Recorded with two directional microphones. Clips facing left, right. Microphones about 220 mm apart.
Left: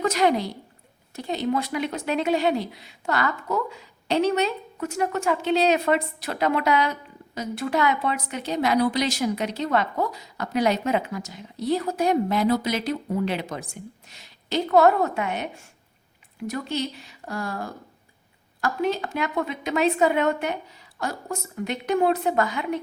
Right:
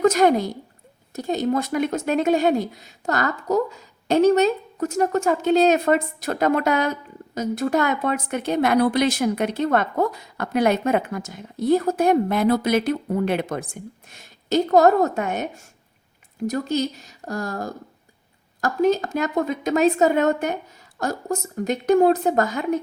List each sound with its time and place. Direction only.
0.0 s a woman's voice: 45° right (ahead or behind)